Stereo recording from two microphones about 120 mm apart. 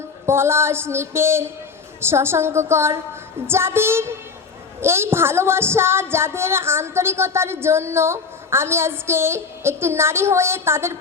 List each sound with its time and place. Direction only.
0.3 s a woman's voice: 20° right (ahead or behind)